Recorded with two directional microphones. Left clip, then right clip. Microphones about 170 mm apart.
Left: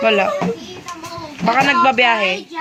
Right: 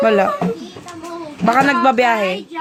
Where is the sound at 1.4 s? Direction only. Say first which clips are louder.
Even; 40° right (ahead or behind).